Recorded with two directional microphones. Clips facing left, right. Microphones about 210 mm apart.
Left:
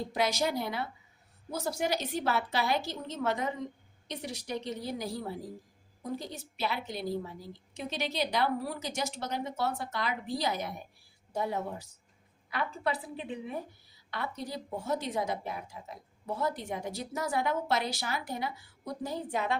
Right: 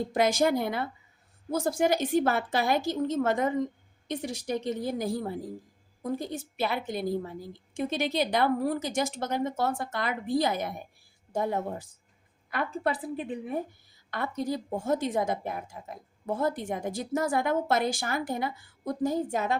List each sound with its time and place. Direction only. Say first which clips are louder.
0.1 s a woman's voice: right 6 dB; 50° right (ahead or behind)